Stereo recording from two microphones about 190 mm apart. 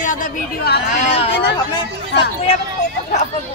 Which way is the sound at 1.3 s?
65° left (ahead or behind).